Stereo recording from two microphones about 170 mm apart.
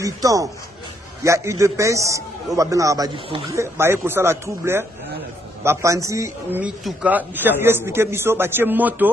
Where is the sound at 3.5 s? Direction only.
15° right (ahead or behind).